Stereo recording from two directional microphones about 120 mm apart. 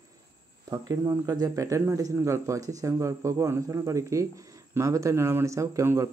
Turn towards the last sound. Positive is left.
turn(degrees=-25)  # may be behind; listen again after turning